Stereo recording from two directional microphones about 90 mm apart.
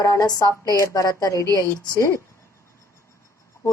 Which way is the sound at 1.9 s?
30° left (ahead or behind).